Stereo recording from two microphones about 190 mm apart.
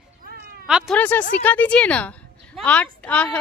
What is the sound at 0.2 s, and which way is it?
Cat, 55° right (ahead or behind).